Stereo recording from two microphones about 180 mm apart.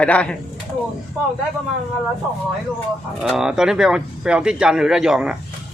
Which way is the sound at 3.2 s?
5° right (ahead or behind).